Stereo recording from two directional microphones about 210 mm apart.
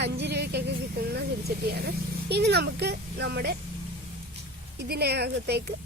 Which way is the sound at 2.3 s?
50° right (ahead or behind).